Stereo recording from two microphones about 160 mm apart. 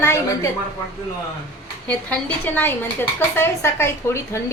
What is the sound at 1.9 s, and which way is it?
A woman's voice, 10° left (ahead or behind).